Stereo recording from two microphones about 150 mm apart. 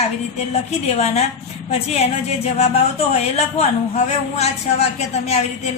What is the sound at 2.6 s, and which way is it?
Speech, 45° left (ahead or behind).